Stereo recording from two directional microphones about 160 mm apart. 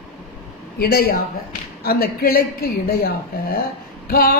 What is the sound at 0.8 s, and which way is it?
Speech, 75° left (ahead or behind).